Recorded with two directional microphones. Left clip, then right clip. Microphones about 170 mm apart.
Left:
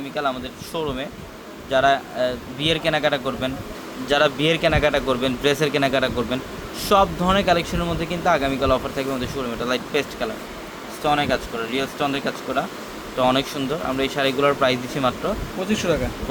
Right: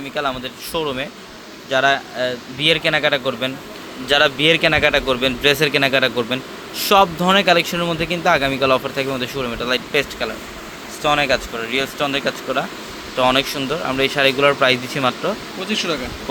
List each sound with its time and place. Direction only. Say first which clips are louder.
0.1 s a man's voice: right 2 dB; 20° right (ahead or behind)
15.6 s speech: right 1 dB; 60° left (ahead or behind)